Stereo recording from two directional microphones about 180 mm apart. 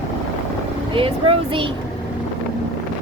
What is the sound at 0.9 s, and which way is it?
Speech, 30° right (ahead or behind).